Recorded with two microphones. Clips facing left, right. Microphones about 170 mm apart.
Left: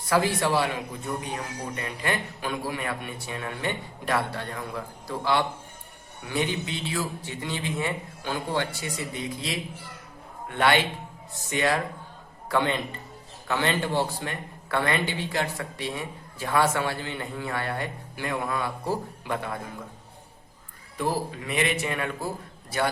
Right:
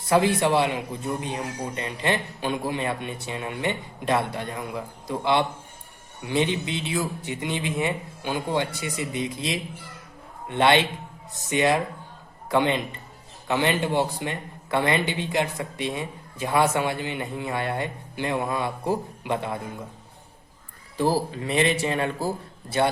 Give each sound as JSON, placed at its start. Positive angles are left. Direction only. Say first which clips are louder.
{"t": 0.1, "sound": "speech", "louder": "right 3 dB", "side_deg": -20}
{"t": 21.0, "sound": "speech", "louder": "right 5 dB", "side_deg": -30}